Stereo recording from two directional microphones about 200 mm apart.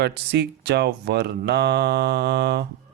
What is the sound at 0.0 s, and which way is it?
Speech, 55° right (ahead or behind).